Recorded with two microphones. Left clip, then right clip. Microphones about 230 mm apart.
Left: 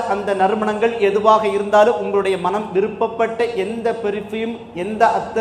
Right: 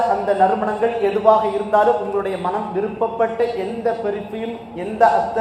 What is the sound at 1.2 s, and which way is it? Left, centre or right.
A man's voice, left.